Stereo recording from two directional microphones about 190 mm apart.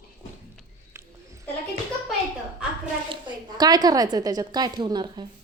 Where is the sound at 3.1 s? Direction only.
25° right (ahead or behind).